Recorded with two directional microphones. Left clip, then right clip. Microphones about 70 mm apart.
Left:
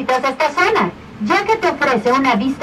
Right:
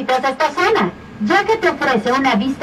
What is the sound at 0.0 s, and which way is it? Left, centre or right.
Speech, centre.